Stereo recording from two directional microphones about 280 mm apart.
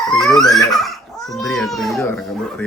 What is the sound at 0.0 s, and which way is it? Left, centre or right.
Speech, centre.